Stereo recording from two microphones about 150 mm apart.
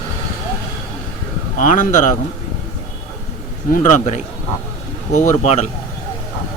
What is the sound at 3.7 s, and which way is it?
Speech, 55° left (ahead or behind).